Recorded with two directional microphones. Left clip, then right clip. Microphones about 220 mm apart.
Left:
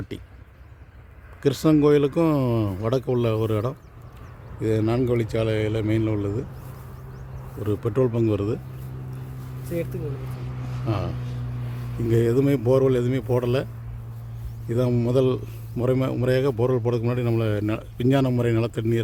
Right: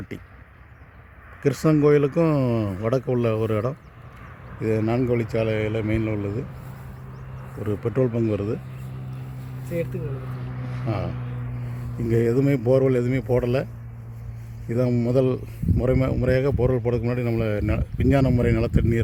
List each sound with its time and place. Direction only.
1.4 s speech: centre (ahead or behind)
7.6 s speech: centre (ahead or behind)
10.2 s vehicle: 35° right (ahead or behind)
10.8 s speech: centre (ahead or behind)
11.1 s a sound: 20° right (ahead or behind)
12.0 s speech: centre (ahead or behind)
14.7 s speech: centre (ahead or behind)